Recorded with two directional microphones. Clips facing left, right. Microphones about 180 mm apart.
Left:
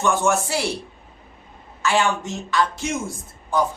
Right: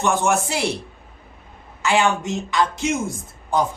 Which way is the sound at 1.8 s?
15° right (ahead or behind).